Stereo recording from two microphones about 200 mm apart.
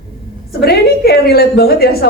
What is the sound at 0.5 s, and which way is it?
A woman's voice, 50° left (ahead or behind).